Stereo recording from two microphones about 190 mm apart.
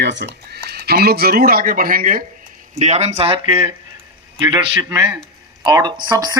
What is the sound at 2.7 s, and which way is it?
Speech, 35° right (ahead or behind).